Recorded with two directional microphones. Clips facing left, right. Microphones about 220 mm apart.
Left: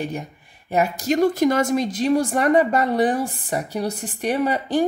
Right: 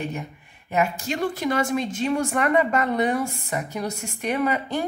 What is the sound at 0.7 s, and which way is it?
A woman's voice, 40° left (ahead or behind).